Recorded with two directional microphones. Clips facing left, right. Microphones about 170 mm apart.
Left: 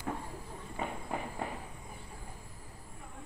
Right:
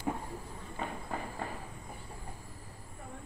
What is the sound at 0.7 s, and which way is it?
Run, 15° left (ahead or behind).